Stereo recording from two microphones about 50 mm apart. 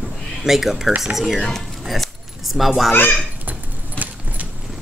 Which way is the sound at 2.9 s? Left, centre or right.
Left.